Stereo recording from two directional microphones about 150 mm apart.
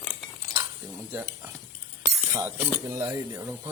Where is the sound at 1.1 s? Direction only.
15° right (ahead or behind).